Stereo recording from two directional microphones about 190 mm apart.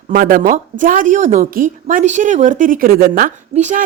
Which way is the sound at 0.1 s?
50° right (ahead or behind).